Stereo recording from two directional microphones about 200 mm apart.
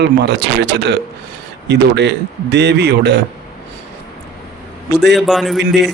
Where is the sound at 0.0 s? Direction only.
60° right (ahead or behind).